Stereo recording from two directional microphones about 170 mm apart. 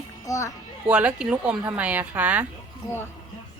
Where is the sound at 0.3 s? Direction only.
20° left (ahead or behind).